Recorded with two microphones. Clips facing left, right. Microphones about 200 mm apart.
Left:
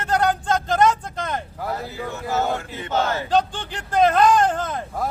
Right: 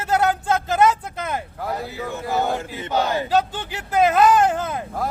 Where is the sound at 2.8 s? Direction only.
15° right (ahead or behind).